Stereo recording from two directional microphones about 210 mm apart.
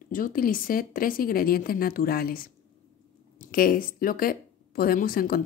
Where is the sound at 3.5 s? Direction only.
45° left (ahead or behind).